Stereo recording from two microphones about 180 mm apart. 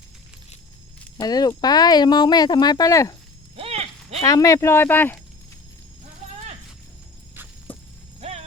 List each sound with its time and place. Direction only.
1.2 s speech: 20° left (ahead or behind)
3.5 s a sound: 35° right (ahead or behind)
4.2 s speech: 20° left (ahead or behind)
8.2 s mechanisms: 35° right (ahead or behind)